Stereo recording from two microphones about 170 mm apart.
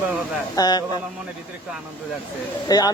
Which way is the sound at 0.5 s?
25° left (ahead or behind).